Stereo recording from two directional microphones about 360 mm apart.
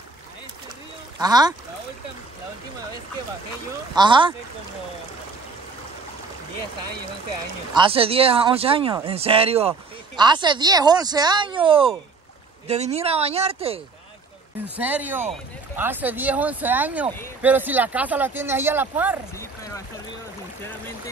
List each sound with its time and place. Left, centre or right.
1.2 s speech: centre
3.9 s speech: centre
7.7 s speech: centre
14.8 s speech: centre
19.3 s a sound: centre